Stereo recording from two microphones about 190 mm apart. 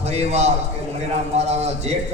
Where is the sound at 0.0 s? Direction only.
35° right (ahead or behind).